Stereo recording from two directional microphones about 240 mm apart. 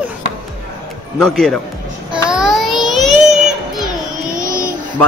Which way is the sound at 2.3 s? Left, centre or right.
Centre.